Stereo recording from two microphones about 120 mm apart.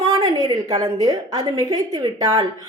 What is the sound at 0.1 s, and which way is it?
A woman's voice, 30° right (ahead or behind).